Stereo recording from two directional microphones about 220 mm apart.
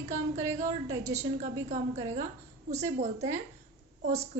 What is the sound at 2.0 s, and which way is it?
A woman's voice, 30° right (ahead or behind).